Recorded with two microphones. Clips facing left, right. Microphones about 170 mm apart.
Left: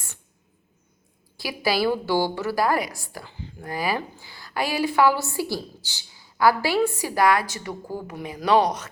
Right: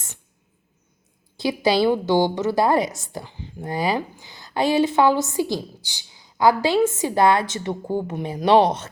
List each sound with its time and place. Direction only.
1.4 s a woman's voice: 20° right (ahead or behind)